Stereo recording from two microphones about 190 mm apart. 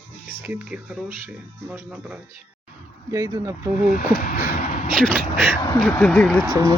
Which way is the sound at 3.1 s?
20° right (ahead or behind).